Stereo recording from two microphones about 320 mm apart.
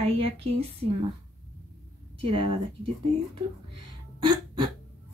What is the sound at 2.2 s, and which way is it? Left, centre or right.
Speech, centre.